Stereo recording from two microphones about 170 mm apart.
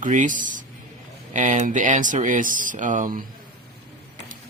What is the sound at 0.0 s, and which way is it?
Speech, 50° right (ahead or behind).